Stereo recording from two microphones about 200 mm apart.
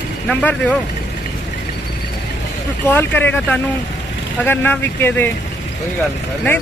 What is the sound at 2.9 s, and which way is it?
Speech, 10° left (ahead or behind).